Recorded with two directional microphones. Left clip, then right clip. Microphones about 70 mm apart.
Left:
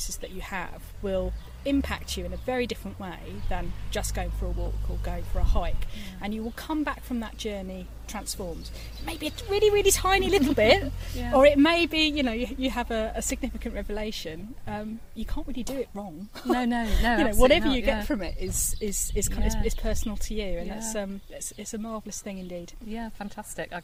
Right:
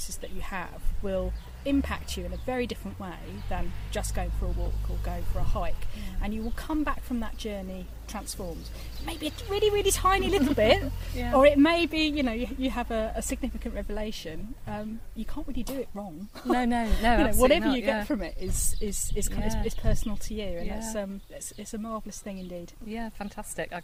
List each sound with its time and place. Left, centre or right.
0.0 s a woman's voice: left
16.5 s speech: centre
17.3 s a woman's voice: left
22.9 s speech: centre